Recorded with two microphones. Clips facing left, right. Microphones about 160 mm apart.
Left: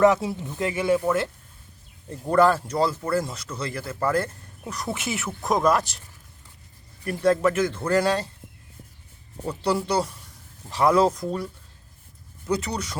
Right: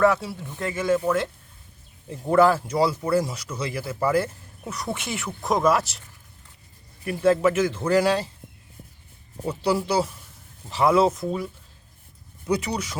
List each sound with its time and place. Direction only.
0.0 s speech: 20° left (ahead or behind)
2.0 s speech: 5° right (ahead or behind)
7.0 s speech: 5° right (ahead or behind)
9.4 s speech: 10° right (ahead or behind)